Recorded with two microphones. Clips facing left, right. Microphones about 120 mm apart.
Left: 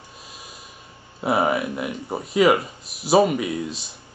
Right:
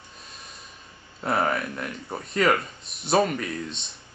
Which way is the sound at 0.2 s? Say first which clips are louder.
Left 2 dB; 5° left (ahead or behind).